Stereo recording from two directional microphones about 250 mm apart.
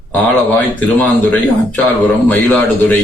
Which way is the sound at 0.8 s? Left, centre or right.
Centre.